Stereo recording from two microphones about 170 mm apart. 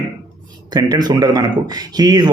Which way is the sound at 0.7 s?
25° right (ahead or behind).